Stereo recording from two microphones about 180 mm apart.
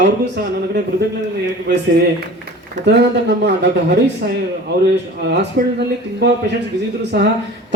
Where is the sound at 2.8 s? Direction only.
70° right (ahead or behind).